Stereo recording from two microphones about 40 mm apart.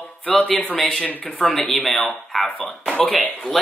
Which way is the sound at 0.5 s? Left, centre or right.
Left.